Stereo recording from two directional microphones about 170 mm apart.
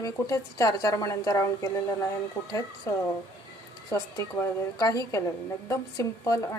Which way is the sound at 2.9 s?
20° left (ahead or behind).